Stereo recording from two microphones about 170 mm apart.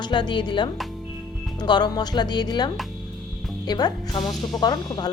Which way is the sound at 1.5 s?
25° left (ahead or behind).